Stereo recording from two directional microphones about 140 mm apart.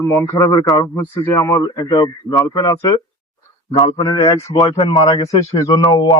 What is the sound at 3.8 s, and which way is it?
Speech, 35° left (ahead or behind).